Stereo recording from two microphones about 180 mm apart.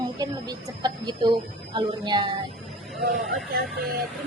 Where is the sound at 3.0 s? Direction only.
Centre (ahead or behind).